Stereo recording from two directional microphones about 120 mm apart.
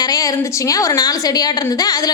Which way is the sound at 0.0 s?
30° left (ahead or behind).